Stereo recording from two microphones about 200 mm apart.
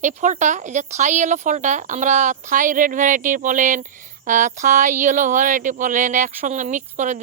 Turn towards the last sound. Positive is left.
turn(degrees=-40)  # may be behind; listen again after turning